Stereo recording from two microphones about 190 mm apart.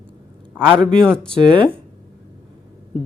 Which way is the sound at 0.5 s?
10° right (ahead or behind).